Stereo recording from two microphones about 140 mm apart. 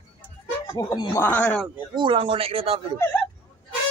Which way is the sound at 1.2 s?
10° left (ahead or behind).